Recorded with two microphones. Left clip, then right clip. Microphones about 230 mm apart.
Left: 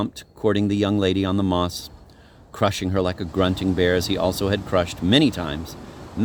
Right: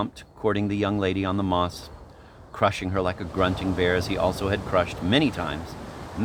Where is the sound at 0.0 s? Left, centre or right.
Left.